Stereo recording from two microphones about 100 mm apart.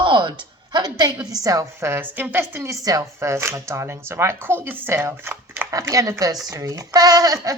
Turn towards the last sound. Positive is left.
turn(degrees=-40)  # may be behind; listen again after turning